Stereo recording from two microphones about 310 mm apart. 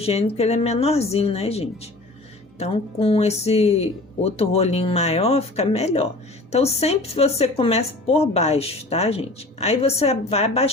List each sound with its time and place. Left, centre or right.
0.0 s speech: centre